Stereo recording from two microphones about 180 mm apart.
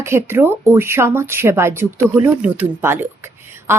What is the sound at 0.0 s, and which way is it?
Speech, 15° right (ahead or behind).